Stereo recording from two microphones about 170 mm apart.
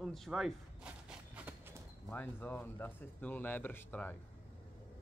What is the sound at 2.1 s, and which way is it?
Speech, 10° left (ahead or behind).